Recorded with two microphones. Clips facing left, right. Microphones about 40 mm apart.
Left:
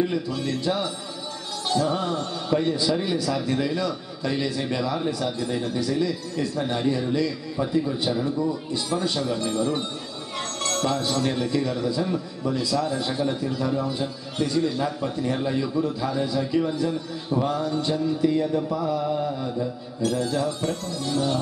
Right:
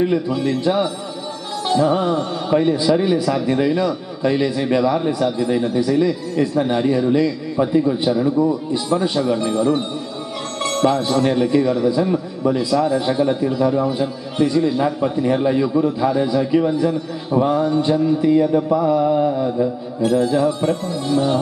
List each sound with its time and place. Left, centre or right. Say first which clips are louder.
0.0 s a man's voice: right 7 dB; right